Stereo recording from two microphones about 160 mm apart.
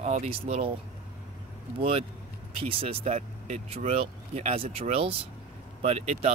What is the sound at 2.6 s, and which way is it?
Speech, 35° right (ahead or behind).